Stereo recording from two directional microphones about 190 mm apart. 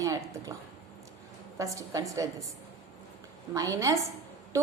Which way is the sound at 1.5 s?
15° right (ahead or behind).